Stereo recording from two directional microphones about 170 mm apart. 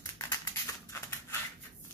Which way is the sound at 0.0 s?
15° left (ahead or behind).